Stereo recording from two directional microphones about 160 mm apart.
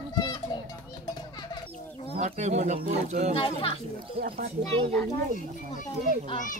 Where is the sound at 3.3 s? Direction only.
35° left (ahead or behind).